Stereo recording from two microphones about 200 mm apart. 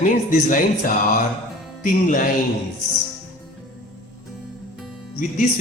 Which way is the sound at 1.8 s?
40° left (ahead or behind).